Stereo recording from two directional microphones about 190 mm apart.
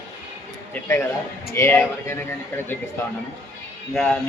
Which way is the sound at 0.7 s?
10° left (ahead or behind).